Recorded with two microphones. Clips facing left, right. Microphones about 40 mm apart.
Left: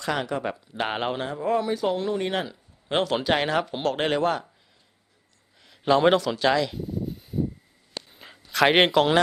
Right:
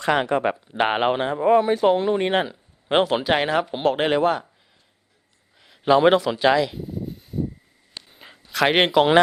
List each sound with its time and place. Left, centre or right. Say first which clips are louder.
0.0 s speech: right 7 dB; right
3.2 s speech: right 3 dB; centre
5.5 s a sound: right 4 dB; centre